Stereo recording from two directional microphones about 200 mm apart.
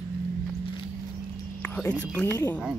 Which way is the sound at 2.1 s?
10° left (ahead or behind).